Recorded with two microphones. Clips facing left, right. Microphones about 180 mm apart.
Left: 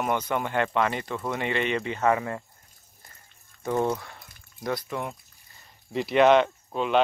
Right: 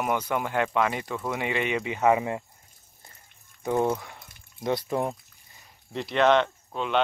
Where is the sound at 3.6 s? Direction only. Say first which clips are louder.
Right 1 dB; 15° right (ahead or behind).